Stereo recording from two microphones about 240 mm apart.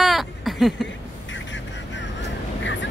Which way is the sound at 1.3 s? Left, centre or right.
Left.